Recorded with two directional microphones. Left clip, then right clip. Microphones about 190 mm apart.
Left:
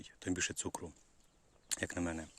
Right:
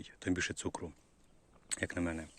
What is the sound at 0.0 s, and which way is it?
Speech, 10° left (ahead or behind).